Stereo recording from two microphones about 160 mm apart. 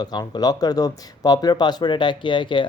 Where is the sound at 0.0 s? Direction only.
25° left (ahead or behind).